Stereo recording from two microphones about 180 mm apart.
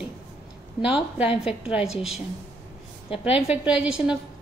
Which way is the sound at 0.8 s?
5° right (ahead or behind).